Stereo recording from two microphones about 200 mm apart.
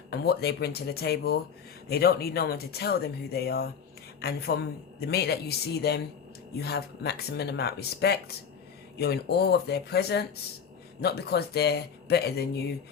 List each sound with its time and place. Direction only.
0.1 s speech: 55° left (ahead or behind)